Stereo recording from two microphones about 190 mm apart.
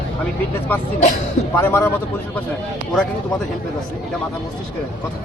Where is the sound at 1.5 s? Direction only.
10° left (ahead or behind).